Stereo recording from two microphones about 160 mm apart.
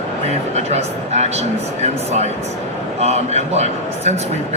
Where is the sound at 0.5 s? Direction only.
45° right (ahead or behind).